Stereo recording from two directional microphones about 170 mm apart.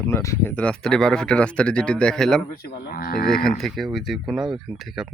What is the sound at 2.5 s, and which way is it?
Speech, 65° left (ahead or behind).